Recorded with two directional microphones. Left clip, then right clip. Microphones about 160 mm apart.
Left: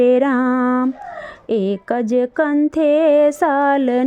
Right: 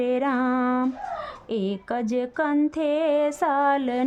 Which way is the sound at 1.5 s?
35° left (ahead or behind).